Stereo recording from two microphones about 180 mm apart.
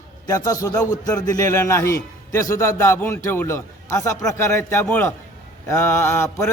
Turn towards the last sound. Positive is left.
turn(degrees=15)  # may be behind; listen again after turning